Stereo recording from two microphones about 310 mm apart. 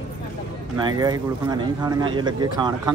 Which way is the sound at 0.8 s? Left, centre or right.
Centre.